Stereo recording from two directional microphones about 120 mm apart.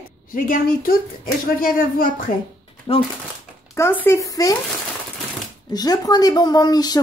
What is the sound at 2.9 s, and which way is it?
Speech, 45° left (ahead or behind).